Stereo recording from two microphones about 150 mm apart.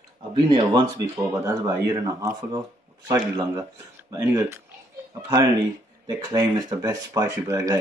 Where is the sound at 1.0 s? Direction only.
20° right (ahead or behind).